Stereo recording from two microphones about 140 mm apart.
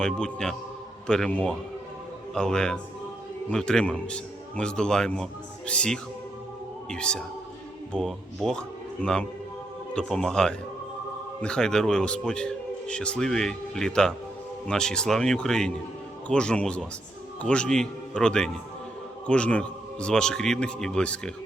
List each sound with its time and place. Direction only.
0.0 s a man's voice: 5° left (ahead or behind)